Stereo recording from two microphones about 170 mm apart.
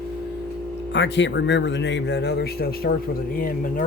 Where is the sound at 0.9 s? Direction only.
90° left; by 2.9 s 65° left (ahead or behind).